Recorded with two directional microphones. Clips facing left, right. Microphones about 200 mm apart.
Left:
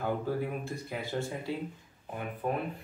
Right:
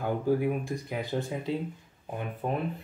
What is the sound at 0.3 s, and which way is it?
Speech, 15° right (ahead or behind).